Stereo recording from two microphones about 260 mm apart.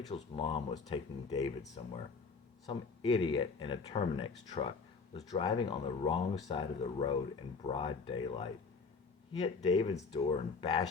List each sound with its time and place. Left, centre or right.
0.1 s speech: left